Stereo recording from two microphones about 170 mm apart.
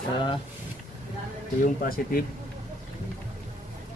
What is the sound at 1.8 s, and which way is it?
Speech, 55° left (ahead or behind).